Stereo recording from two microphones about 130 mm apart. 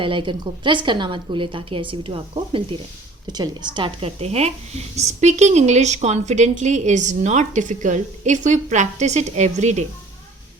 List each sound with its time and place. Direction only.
0.0 s a woman's voice: 40° right (ahead or behind)
3.3 s a woman's voice: 35° right (ahead or behind)
4.2 s a woman's voice: 55° right (ahead or behind)